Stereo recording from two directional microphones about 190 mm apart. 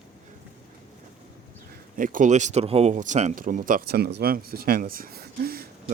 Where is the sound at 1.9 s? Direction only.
45° right (ahead or behind).